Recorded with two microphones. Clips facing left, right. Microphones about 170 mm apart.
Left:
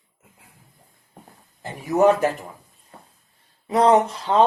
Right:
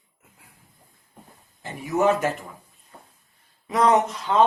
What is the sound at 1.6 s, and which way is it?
Speech, 40° left (ahead or behind).